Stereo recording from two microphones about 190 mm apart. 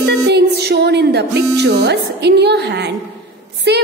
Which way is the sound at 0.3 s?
60° right (ahead or behind).